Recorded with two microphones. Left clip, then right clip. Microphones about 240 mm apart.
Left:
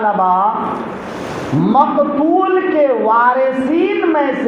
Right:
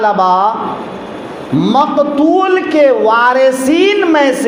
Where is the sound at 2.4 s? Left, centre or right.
Right.